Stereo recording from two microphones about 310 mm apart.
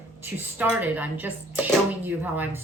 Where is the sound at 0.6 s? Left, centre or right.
Centre.